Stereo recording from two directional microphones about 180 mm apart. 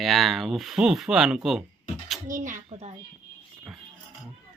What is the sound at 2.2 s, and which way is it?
Speech, 45° right (ahead or behind).